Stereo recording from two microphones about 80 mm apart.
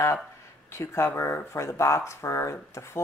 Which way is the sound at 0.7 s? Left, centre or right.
Left.